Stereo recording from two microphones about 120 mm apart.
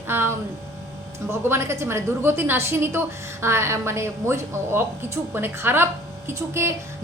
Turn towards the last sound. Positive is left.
turn(degrees=-25)  # may be behind; listen again after turning